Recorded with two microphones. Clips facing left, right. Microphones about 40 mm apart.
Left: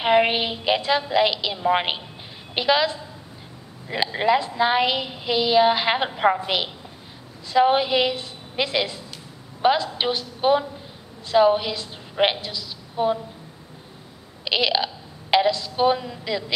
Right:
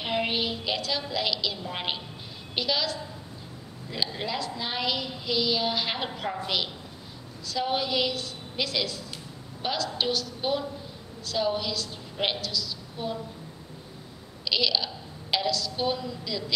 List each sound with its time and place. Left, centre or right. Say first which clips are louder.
0.0 s a woman's voice: left 9 dB; left
14.4 s a woman's voice: left 5 dB; left